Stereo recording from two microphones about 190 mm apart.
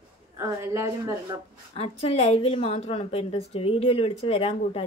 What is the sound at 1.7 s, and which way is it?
A woman's voice, 30° left (ahead or behind).